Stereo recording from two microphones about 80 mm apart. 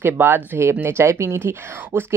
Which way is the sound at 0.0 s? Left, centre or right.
Right.